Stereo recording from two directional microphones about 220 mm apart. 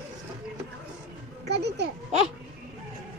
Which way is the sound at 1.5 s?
50° right (ahead or behind).